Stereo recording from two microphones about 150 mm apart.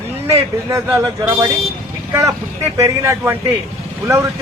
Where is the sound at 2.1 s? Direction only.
20° right (ahead or behind).